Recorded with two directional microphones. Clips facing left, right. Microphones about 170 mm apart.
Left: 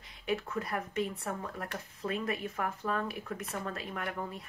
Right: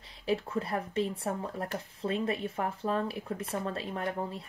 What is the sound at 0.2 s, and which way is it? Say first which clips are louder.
Speech: right 3 dB; 30° right (ahead or behind).